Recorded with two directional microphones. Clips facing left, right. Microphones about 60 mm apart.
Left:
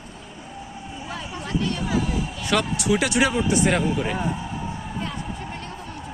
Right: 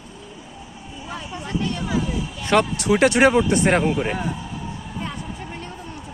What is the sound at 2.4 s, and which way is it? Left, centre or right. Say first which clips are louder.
Speech: right 4 dB; right.